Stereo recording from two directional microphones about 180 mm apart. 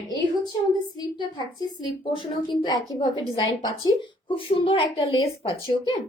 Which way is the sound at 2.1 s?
25° left (ahead or behind).